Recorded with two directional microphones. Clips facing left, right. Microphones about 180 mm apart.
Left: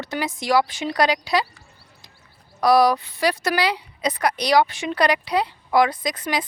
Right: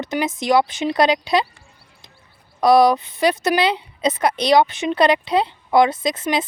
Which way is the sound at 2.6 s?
20° right (ahead or behind).